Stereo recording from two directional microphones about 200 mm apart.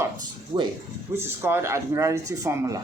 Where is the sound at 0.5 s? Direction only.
20° right (ahead or behind).